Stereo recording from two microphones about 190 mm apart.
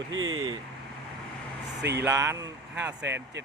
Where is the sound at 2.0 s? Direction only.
15° right (ahead or behind).